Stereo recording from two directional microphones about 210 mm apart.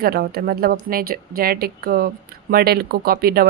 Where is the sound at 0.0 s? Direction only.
45° right (ahead or behind).